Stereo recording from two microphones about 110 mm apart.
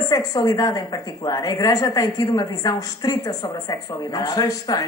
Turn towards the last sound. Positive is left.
turn(degrees=35)  # may be behind; listen again after turning